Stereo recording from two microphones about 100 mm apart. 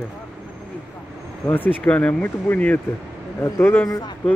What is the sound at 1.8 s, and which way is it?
Speech, 15° left (ahead or behind).